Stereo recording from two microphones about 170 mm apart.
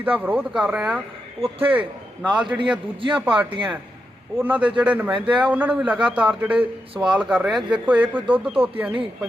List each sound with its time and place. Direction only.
0.0 s a man's voice: 10° right (ahead or behind)
1.4 s a man's voice: 35° right (ahead or behind)
2.5 s a man's voice: 10° right (ahead or behind)
3.0 s a man's voice: 30° right (ahead or behind)
4.4 s a man's voice: 10° right (ahead or behind)